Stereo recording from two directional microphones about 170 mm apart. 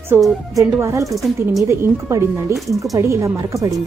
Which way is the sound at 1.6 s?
15° right (ahead or behind).